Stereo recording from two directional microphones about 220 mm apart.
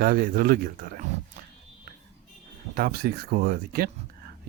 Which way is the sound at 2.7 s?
45° right (ahead or behind).